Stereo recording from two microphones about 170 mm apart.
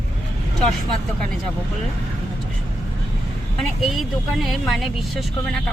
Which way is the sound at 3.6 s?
Centre (ahead or behind).